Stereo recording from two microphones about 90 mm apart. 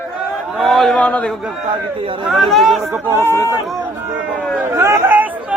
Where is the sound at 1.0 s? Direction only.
10° left (ahead or behind).